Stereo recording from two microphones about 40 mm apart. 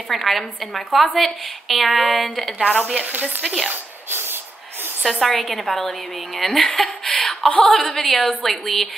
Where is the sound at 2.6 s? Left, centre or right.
Right.